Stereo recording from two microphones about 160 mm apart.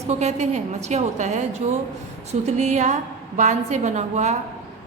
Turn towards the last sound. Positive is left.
turn(degrees=-45)  # may be behind; listen again after turning